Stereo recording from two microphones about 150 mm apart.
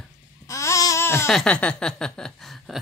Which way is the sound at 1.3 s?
5° left (ahead or behind).